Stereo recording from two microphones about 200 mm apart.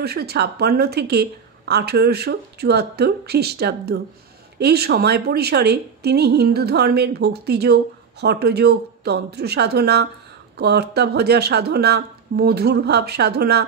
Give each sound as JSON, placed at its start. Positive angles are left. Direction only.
{"t": 0.0, "sound": "a woman's voice", "side_deg": -55}